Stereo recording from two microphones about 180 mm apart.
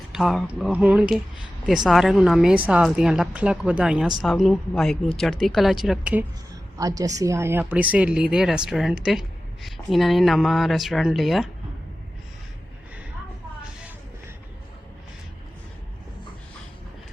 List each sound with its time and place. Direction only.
0.1 s a woman's voice: centre (ahead or behind)
6.7 s a woman's voice: 20° right (ahead or behind); by 11.4 s centre (ahead or behind)